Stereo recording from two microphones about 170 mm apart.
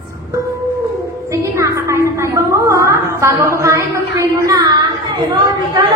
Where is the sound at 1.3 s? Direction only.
15° right (ahead or behind).